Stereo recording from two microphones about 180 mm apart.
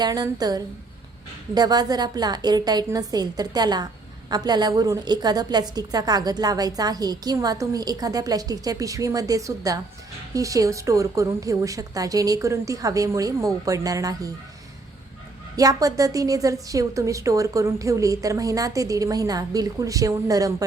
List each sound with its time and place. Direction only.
0.0 s a woman's voice: 20° right (ahead or behind)
15.5 s a woman's voice: 20° right (ahead or behind)